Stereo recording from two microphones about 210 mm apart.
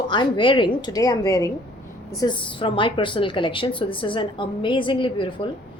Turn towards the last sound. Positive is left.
turn(degrees=25)  # may be behind; listen again after turning